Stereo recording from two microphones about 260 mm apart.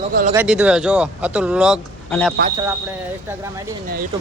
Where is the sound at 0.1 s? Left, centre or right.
Right.